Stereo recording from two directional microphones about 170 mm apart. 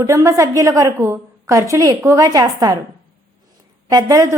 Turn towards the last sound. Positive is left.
turn(degrees=-20)  # may be behind; listen again after turning